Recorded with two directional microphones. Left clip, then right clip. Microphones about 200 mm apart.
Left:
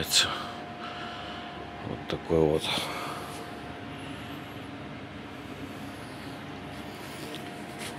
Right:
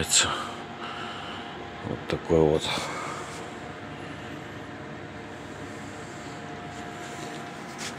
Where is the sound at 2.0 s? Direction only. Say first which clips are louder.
Right 3 dB; 20° right (ahead or behind).